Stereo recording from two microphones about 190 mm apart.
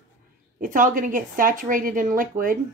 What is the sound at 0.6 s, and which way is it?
A woman's voice, 45° right (ahead or behind).